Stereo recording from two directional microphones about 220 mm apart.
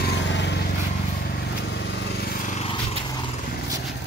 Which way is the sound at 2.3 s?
35° left (ahead or behind).